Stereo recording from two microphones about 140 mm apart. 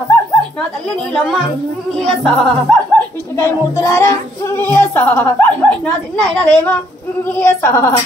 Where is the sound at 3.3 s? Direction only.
20° left (ahead or behind).